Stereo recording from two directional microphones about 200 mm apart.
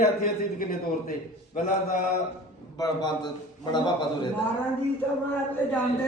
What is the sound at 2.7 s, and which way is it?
A man's voice, 20° left (ahead or behind).